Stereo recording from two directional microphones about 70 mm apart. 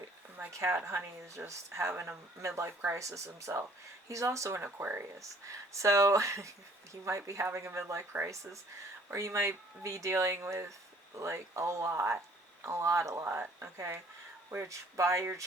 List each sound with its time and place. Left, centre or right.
0.5 s speech: right
5.5 s speech: right
9.0 s speech: right